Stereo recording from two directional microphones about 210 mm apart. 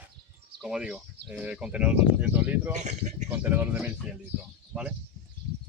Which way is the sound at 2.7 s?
35° right (ahead or behind).